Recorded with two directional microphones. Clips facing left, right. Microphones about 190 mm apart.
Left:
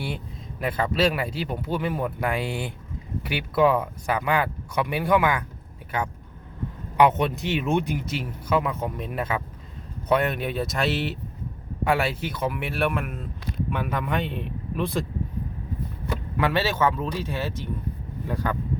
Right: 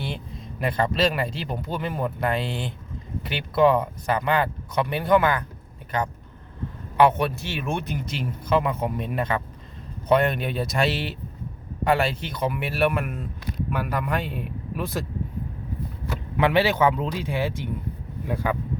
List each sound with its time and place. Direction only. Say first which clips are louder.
0.0 s speech: even; 5° left (ahead or behind)
6.9 s speech: even; 20° left (ahead or behind)
8.0 s speech: even; 5° left (ahead or behind)
16.4 s speech: right 3 dB; 15° right (ahead or behind)